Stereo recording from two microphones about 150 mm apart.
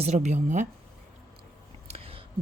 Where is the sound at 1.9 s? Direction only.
40° right (ahead or behind).